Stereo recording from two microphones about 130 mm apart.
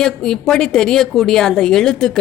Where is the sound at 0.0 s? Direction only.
5° left (ahead or behind).